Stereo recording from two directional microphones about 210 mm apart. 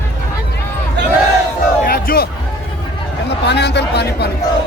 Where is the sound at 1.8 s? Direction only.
45° left (ahead or behind).